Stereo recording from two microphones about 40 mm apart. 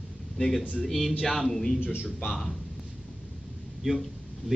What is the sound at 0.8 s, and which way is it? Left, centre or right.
Speech, centre.